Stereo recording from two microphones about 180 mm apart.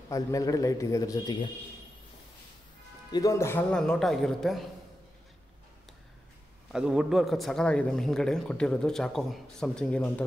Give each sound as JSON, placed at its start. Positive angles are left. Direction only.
{"t": 0.1, "sound": "a man's voice", "side_deg": 20}
{"t": 3.1, "sound": "speech", "side_deg": 20}
{"t": 6.7, "sound": "speech", "side_deg": -5}